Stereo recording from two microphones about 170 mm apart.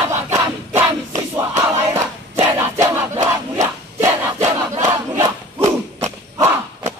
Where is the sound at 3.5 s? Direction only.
15° right (ahead or behind).